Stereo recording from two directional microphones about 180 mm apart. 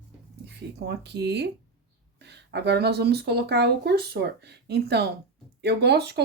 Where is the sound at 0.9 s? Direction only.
70° right (ahead or behind).